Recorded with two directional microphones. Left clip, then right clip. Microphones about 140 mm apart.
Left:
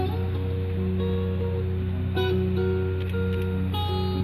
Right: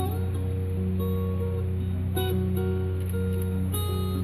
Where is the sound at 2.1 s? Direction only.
30° left (ahead or behind).